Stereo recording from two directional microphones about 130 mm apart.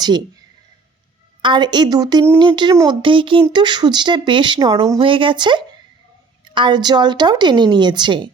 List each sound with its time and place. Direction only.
1.4 s speech: 35° right (ahead or behind)
4.9 s speech: 40° right (ahead or behind)